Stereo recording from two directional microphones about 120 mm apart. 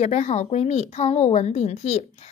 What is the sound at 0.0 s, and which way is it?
Speech, 70° left (ahead or behind).